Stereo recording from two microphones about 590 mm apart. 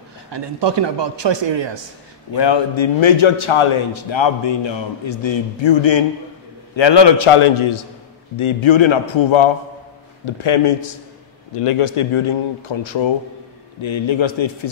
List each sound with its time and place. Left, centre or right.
0.3 s a man's voice: right
2.3 s a man's voice: left